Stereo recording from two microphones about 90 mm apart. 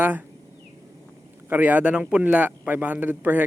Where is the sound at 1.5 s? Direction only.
20° right (ahead or behind).